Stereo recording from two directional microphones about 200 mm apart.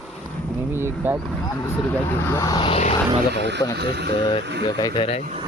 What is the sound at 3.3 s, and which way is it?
Speech, 60° right (ahead or behind).